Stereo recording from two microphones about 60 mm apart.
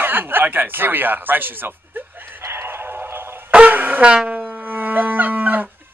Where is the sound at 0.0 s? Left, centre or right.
Right.